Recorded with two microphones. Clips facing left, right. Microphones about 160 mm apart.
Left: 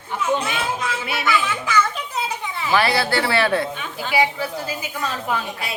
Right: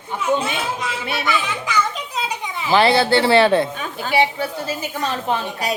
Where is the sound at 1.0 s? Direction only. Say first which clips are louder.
Even; 20° right (ahead or behind).